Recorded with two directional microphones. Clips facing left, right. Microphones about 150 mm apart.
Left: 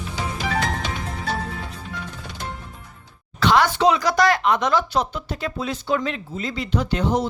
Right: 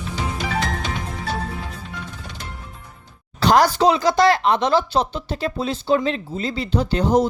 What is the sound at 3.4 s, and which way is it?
Speech, 40° right (ahead or behind).